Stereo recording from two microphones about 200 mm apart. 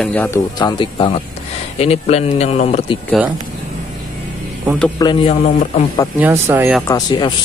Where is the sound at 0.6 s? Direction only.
25° left (ahead or behind).